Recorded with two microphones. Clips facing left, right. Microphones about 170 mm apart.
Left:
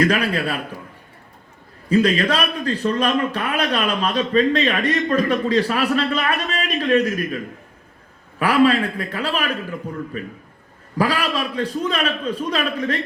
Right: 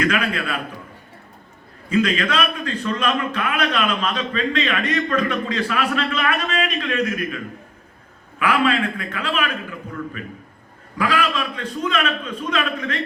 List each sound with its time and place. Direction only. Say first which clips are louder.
0.0 s a man's voice: left 3 dB; 35° left (ahead or behind)
1.9 s a man's voice: left 3 dB; 35° left (ahead or behind)